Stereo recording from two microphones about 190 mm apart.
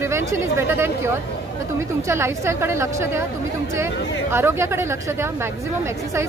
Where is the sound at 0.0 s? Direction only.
15° right (ahead or behind).